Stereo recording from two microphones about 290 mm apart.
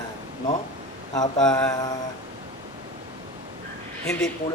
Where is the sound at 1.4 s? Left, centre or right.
Centre.